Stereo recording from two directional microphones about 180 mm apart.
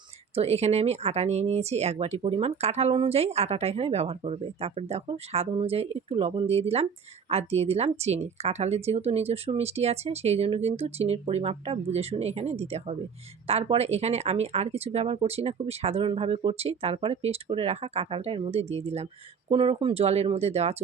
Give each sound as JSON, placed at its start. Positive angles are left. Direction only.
{"t": 0.3, "sound": "speech", "side_deg": -35}